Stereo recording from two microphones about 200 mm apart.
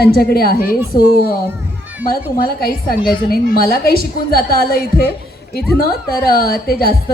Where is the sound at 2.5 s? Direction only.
50° left (ahead or behind).